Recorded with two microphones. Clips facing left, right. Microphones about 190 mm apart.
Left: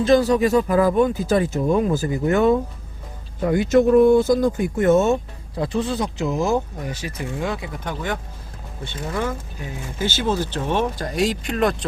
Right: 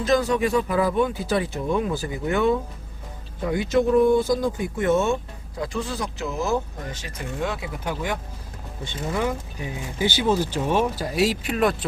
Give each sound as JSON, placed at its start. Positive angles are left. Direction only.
{"t": 0.0, "sound": "speech", "side_deg": 35}
{"t": 5.5, "sound": "speech", "side_deg": 25}